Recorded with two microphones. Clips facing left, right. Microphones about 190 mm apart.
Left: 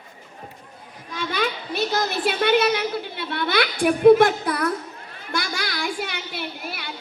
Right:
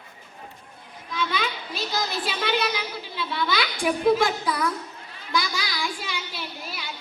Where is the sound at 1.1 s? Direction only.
50° left (ahead or behind).